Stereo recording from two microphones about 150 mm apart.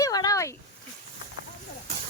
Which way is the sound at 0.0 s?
25° left (ahead or behind).